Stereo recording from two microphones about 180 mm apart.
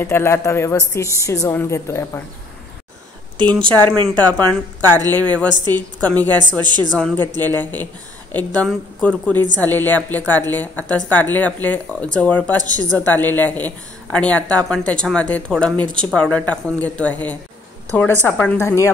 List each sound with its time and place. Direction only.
0.0 s speech: 15° left (ahead or behind)
3.9 s speech: 25° right (ahead or behind)
4.2 s speech: 10° left (ahead or behind)
6.6 s speech: 25° right (ahead or behind)
6.9 s a woman's voice: 5° left (ahead or behind)